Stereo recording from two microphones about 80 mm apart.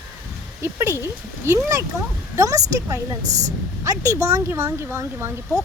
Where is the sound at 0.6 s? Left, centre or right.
Right.